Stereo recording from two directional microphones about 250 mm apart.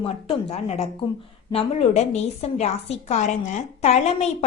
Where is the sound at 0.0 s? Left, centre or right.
Left.